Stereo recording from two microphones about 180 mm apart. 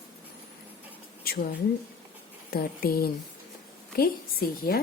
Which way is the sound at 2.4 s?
55° left (ahead or behind).